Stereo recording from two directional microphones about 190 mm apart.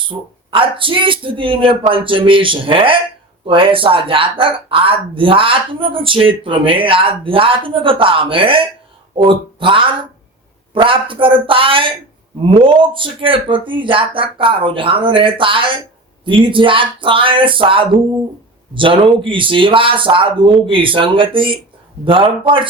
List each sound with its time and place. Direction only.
0.1 s speech: 25° right (ahead or behind)